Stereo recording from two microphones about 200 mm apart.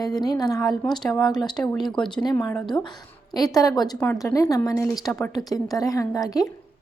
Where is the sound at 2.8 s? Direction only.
20° left (ahead or behind).